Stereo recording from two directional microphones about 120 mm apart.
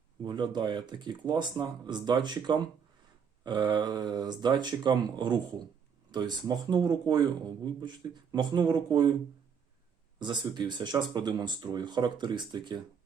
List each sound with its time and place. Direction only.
0.2 s a man's voice: 40° right (ahead or behind)
10.2 s a man's voice: 40° right (ahead or behind)